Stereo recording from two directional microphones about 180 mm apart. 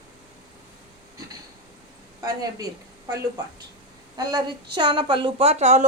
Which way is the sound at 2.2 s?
20° right (ahead or behind).